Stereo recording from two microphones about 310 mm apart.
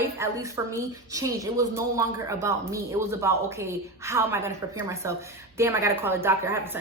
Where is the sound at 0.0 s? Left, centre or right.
Centre.